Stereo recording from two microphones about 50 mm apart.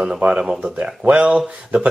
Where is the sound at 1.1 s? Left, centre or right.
Right.